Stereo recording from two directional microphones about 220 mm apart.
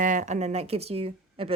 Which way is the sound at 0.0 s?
35° right (ahead or behind).